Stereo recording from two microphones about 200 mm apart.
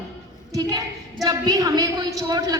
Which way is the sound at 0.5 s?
15° right (ahead or behind).